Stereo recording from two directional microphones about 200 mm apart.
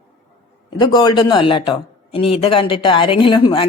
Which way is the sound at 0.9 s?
25° left (ahead or behind).